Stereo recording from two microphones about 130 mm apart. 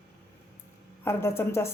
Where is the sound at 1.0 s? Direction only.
20° left (ahead or behind).